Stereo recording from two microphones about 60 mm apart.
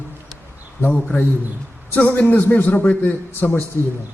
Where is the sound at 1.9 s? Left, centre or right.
Left.